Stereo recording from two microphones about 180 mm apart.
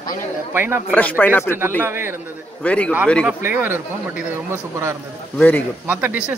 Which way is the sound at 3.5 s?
10° right (ahead or behind).